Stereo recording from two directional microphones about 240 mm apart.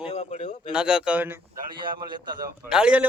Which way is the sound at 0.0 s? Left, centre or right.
Left.